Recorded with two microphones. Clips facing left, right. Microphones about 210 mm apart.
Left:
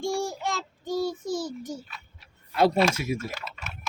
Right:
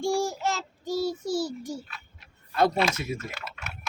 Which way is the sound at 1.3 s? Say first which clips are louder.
Right 2 dB; 45° left (ahead or behind).